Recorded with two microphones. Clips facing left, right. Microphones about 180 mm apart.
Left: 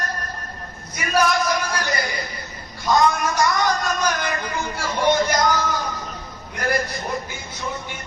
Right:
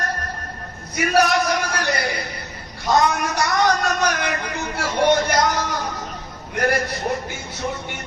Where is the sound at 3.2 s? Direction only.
70° right (ahead or behind).